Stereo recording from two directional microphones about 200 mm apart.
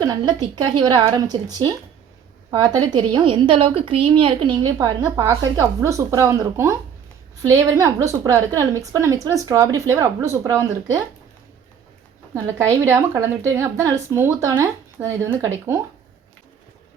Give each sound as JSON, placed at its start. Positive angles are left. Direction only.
{"t": 0.0, "sound": "a woman's voice", "side_deg": -20}
{"t": 2.9, "sound": "a woman's voice", "side_deg": -20}
{"t": 12.3, "sound": "a woman's voice", "side_deg": -10}